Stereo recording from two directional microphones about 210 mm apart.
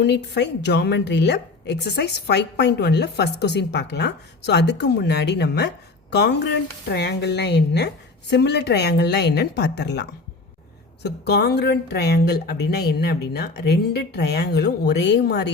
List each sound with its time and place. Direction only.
0.0 s a woman's voice: 55° left (ahead or behind)